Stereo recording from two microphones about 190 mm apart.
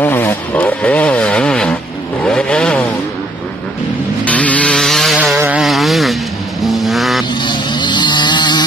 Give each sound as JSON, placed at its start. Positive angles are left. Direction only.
{"t": 0.0, "sound": "vehicle", "side_deg": 10}
{"t": 4.2, "sound": "vehicle", "side_deg": 5}
{"t": 7.4, "sound": "vehicle", "side_deg": 25}